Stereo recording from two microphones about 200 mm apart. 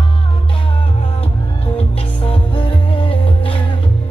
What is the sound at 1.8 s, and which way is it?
Music, 30° left (ahead or behind).